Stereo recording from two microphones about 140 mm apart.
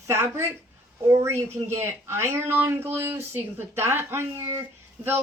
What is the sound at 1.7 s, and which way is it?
Speech, 20° right (ahead or behind).